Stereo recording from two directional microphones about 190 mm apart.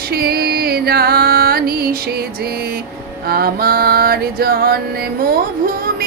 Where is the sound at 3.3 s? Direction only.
55° right (ahead or behind).